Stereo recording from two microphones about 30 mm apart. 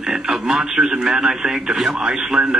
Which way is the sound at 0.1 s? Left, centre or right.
Centre.